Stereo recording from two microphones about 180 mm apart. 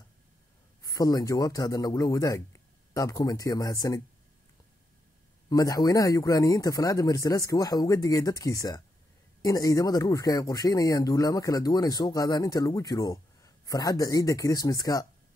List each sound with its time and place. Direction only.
0.8 s speech: 20° left (ahead or behind)
5.5 s speech: 20° left (ahead or behind)